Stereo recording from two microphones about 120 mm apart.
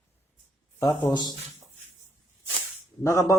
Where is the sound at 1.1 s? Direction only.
35° left (ahead or behind).